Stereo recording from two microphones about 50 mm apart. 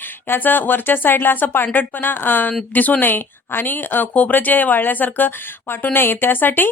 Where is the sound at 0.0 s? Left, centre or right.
Left.